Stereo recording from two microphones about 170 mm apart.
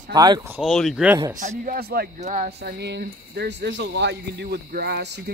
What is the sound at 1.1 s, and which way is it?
Speech, 20° right (ahead or behind).